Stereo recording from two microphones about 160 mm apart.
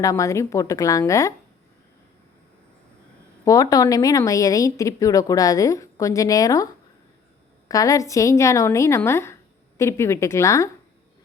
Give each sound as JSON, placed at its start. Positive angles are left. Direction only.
{"t": 0.0, "sound": "a woman's voice", "side_deg": 20}
{"t": 3.4, "sound": "a woman's voice", "side_deg": 20}
{"t": 7.7, "sound": "a woman's voice", "side_deg": 20}